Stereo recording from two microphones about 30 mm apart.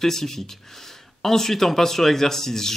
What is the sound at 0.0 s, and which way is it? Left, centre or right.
Speech, centre.